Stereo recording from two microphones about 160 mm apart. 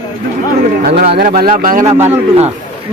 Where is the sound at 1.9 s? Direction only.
45° right (ahead or behind).